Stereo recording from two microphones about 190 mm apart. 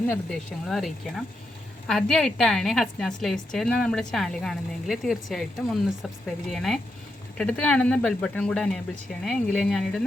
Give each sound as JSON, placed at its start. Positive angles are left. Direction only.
{"t": 0.1, "sound": "a woman's voice", "side_deg": 5}